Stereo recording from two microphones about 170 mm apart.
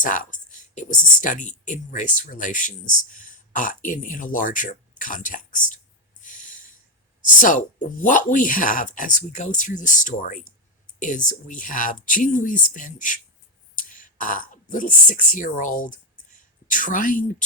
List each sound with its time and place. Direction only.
0.0 s speech: 50° left (ahead or behind)
6.2 s snort: 50° left (ahead or behind)
7.3 s speech: 50° left (ahead or behind)